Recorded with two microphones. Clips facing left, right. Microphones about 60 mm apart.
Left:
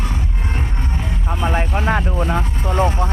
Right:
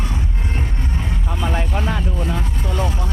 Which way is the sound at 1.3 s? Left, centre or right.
Left.